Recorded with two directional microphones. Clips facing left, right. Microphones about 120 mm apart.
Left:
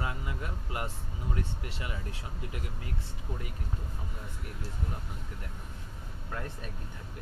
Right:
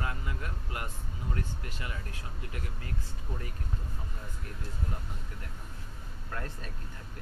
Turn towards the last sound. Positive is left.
turn(degrees=10)  # may be behind; listen again after turning